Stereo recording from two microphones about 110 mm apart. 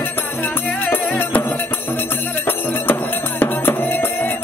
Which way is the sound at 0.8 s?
15° left (ahead or behind).